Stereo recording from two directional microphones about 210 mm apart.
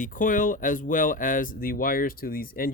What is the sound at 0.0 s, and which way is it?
Speech, 40° left (ahead or behind).